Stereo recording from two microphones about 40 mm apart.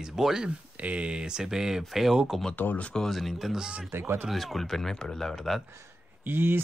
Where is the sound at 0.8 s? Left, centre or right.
Right; by 2.1 s centre.